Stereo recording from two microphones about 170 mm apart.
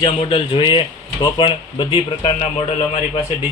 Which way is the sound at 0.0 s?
30° left (ahead or behind).